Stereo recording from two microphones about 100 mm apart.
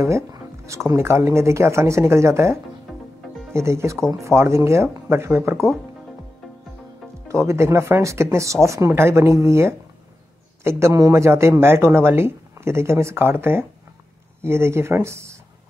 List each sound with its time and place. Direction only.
0.0 s speech: 30° right (ahead or behind)
7.2 s speech: 30° right (ahead or behind)